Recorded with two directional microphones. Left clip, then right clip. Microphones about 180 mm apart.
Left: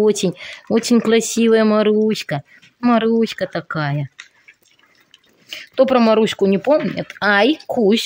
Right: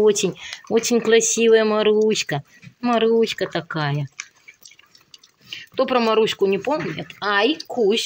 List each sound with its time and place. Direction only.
0.0 s speech: 30° left (ahead or behind)
5.5 s speech: 50° left (ahead or behind)